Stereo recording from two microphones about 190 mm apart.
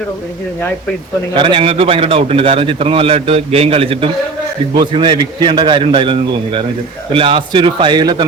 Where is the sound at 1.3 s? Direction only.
25° right (ahead or behind).